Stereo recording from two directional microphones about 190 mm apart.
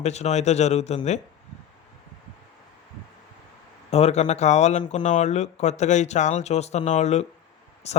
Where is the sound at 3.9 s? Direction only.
35° left (ahead or behind).